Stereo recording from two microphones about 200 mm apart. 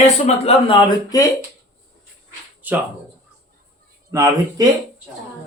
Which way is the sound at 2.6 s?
10° right (ahead or behind).